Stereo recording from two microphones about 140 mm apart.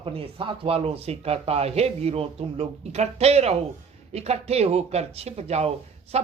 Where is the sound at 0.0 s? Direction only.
45° right (ahead or behind).